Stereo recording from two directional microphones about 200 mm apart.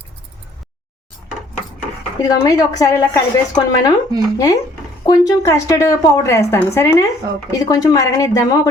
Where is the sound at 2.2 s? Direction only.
20° left (ahead or behind).